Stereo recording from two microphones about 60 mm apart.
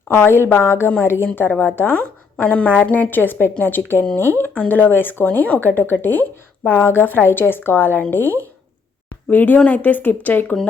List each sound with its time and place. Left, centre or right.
0.1 s speech: left
1.4 s a woman's voice: left
9.3 s a woman's voice: left